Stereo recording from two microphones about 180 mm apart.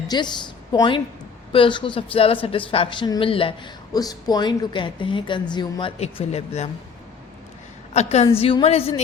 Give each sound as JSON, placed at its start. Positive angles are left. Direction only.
{"t": 0.1, "sound": "a woman's voice", "side_deg": 25}
{"t": 6.0, "sound": "a woman's voice", "side_deg": 35}
{"t": 7.9, "sound": "a woman's voice", "side_deg": 35}